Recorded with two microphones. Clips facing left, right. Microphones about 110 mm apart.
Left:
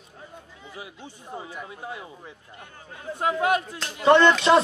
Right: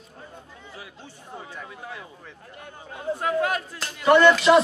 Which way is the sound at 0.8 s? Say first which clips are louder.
Left 4 dB; 15° left (ahead or behind).